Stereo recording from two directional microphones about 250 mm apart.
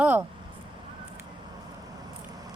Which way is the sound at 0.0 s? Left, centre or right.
Centre.